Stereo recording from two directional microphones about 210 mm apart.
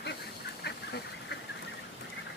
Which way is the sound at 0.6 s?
50° left (ahead or behind).